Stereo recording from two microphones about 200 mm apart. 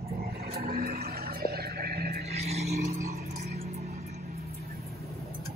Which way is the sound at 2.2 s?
30° right (ahead or behind).